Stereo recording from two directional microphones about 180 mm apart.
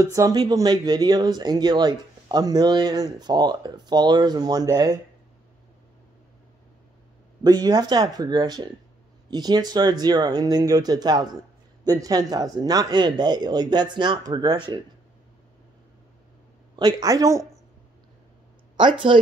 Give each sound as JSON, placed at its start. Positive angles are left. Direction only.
{"t": 0.0, "sound": "speech", "side_deg": -15}
{"t": 7.4, "sound": "speech", "side_deg": -20}
{"t": 16.7, "sound": "speech", "side_deg": -20}
{"t": 18.8, "sound": "speech", "side_deg": -25}